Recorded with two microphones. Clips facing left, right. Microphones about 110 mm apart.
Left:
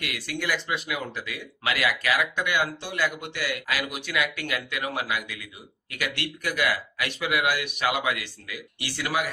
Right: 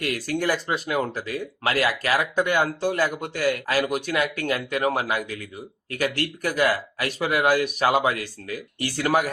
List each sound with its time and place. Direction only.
0.0 s speech: 40° right (ahead or behind)